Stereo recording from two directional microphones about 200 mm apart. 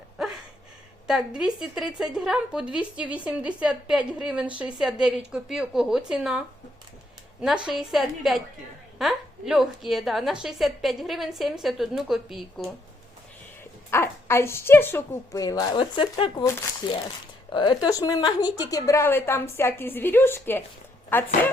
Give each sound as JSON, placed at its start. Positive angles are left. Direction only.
{"t": 1.0, "sound": "a woman's voice", "side_deg": -5}
{"t": 7.7, "sound": "a woman's voice", "side_deg": 0}
{"t": 13.9, "sound": "a woman's voice", "side_deg": 10}